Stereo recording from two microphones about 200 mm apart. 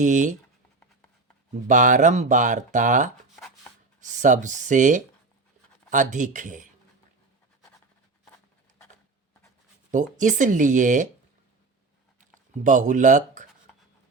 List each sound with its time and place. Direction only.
0.0 s speech: 40° right (ahead or behind)
1.6 s speech: 40° right (ahead or behind)
9.9 s speech: 40° right (ahead or behind)
12.6 s speech: 40° right (ahead or behind)